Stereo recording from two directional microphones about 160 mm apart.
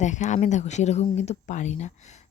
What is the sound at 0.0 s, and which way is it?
Speech, 50° left (ahead or behind).